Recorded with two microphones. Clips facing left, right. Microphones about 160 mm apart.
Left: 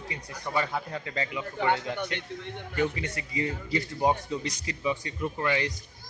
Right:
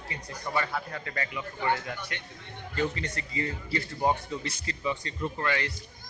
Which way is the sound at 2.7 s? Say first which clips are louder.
Left 1 dB; 10° left (ahead or behind).